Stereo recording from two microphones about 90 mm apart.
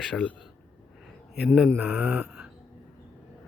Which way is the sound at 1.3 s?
5° right (ahead or behind).